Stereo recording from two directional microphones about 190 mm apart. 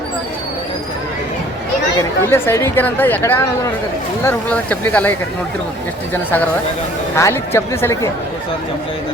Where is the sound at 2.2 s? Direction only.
10° left (ahead or behind).